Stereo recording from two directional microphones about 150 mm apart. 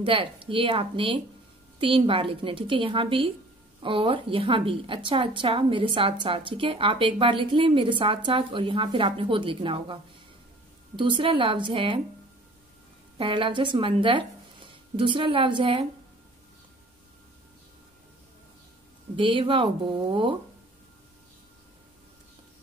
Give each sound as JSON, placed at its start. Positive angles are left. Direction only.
{"t": 0.0, "sound": "a woman's voice", "side_deg": -35}
{"t": 11.0, "sound": "a woman's voice", "side_deg": -35}
{"t": 13.2, "sound": "speech", "side_deg": -35}
{"t": 19.1, "sound": "a woman's voice", "side_deg": -35}